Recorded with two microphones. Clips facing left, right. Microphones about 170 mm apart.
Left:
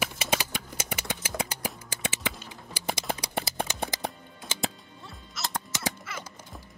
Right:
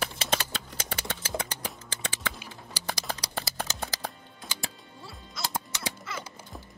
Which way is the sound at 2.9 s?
25° left (ahead or behind).